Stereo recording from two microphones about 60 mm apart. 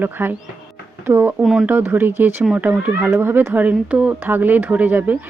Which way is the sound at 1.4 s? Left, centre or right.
Centre.